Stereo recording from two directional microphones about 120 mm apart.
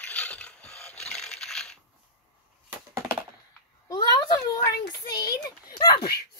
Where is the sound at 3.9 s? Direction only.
30° left (ahead or behind).